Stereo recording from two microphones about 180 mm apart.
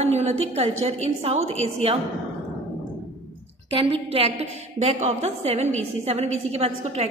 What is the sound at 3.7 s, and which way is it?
A woman's voice, 30° right (ahead or behind).